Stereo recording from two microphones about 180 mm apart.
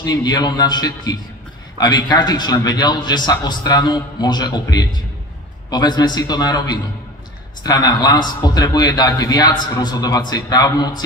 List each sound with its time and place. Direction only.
0.0 s a man's voice: 20° left (ahead or behind)